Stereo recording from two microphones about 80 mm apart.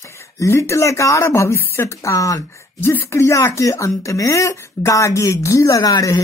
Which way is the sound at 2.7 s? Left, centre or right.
Left.